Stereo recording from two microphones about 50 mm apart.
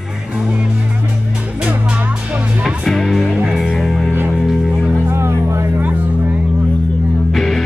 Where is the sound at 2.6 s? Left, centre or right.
Centre.